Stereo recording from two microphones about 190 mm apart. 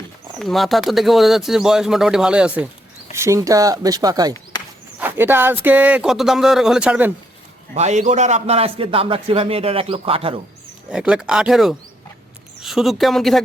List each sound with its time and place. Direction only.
0.3 s speech: centre (ahead or behind)
3.2 s speech: 15° right (ahead or behind)
7.7 s a man's voice: 35° right (ahead or behind)
10.8 s speech: 5° right (ahead or behind)